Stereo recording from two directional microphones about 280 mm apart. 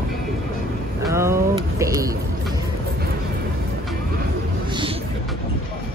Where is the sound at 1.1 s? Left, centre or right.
Centre.